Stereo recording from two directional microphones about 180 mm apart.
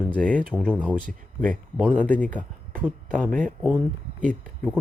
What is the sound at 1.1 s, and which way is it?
Speech, 45° right (ahead or behind).